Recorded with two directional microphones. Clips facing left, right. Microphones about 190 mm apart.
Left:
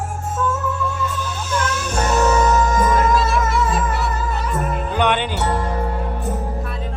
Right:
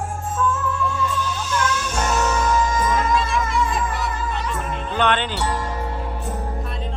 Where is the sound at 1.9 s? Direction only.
40° left (ahead or behind).